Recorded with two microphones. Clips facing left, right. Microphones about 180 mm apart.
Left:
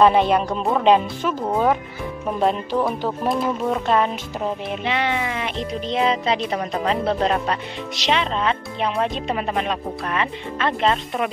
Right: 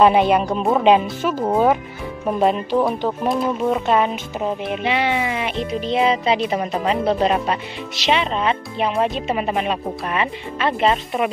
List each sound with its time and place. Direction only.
0.0 s speech: 5° right (ahead or behind)
2.4 s speech: centre (ahead or behind)